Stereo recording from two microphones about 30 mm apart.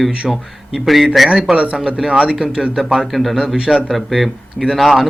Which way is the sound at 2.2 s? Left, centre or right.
Right.